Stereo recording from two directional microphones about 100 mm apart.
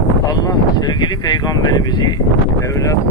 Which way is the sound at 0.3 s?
40° left (ahead or behind).